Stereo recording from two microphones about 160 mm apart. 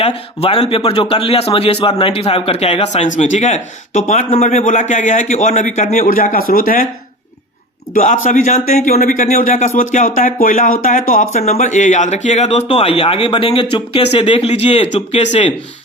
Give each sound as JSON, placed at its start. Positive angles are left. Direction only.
{"t": 0.0, "sound": "a man's voice", "side_deg": 35}
{"t": 7.9, "sound": "a man's voice", "side_deg": 50}